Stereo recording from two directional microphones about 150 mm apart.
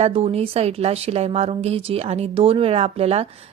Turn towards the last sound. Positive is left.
turn(degrees=-40)  # may be behind; listen again after turning